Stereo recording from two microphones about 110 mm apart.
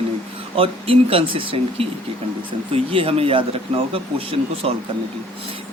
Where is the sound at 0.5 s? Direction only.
55° right (ahead or behind).